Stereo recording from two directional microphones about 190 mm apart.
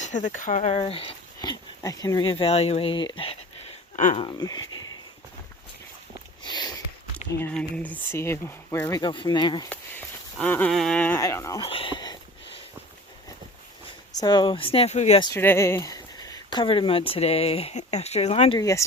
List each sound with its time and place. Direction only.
0.3 s speech: 40° left (ahead or behind); by 3.3 s 25° left (ahead or behind)
3.9 s speech: 40° left (ahead or behind)
4.2 s speech: 20° left (ahead or behind)
6.4 s sniff: 20° left (ahead or behind)
7.5 s speech: 10° left (ahead or behind)
9.6 s speech: 10° left (ahead or behind)
11.6 s speech: 25° left (ahead or behind)
14.2 s speech: 25° left (ahead or behind)
15.2 s speech: 15° left (ahead or behind); by 18.6 s 30° left (ahead or behind)
18.6 s speech: 15° left (ahead or behind)